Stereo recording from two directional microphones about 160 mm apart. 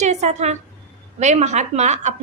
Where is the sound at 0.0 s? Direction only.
45° right (ahead or behind).